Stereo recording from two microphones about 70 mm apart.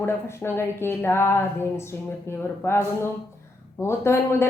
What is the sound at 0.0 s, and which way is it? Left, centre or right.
Speech, left.